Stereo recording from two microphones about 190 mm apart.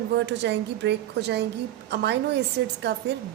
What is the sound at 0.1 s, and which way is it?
A woman's voice, 65° right (ahead or behind).